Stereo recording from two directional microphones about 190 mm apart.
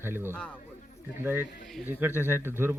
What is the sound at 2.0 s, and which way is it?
Speech, 10° right (ahead or behind).